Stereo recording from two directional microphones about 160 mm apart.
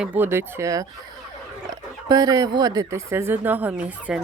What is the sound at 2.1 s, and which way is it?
Speech, 25° right (ahead or behind).